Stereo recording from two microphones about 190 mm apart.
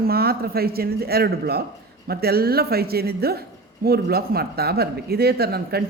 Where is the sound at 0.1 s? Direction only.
55° right (ahead or behind).